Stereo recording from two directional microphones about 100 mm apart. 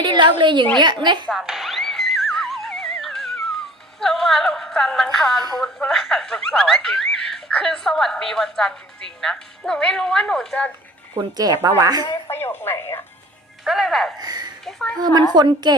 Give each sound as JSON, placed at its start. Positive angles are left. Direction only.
{"t": 0.0, "sound": "a woman's voice", "side_deg": -50}
{"t": 1.3, "sound": "music", "side_deg": -5}
{"t": 4.0, "sound": "speech", "side_deg": 5}
{"t": 11.1, "sound": "speech", "side_deg": -40}
{"t": 12.3, "sound": "speech", "side_deg": 20}
{"t": 13.7, "sound": "speech", "side_deg": -5}
{"t": 14.2, "sound": "a woman's voice", "side_deg": -45}
{"t": 14.6, "sound": "a woman's voice", "side_deg": 5}
{"t": 15.4, "sound": "a woman's voice", "side_deg": -45}